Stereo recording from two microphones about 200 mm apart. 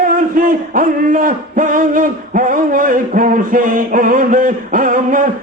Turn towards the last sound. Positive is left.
turn(degrees=-40)  # may be behind; listen again after turning